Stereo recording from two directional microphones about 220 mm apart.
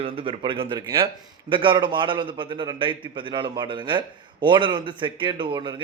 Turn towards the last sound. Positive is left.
turn(degrees=-20)  # may be behind; listen again after turning